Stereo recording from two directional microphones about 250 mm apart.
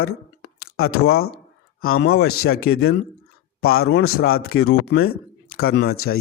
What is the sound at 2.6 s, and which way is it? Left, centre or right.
Speech, left.